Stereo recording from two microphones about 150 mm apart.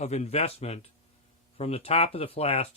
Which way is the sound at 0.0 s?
50° left (ahead or behind).